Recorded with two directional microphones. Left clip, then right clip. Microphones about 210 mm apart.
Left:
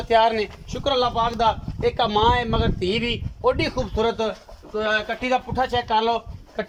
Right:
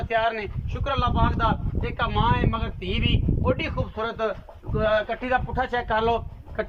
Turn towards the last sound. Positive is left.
turn(degrees=15)  # may be behind; listen again after turning